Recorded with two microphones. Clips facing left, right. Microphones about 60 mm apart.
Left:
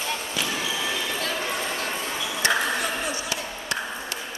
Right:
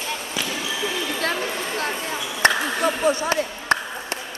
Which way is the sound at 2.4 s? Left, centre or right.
Right.